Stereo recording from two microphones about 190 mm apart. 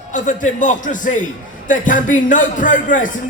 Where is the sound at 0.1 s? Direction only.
45° left (ahead or behind).